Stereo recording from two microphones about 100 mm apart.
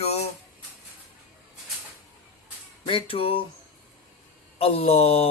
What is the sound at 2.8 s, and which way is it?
Speech, 65° left (ahead or behind).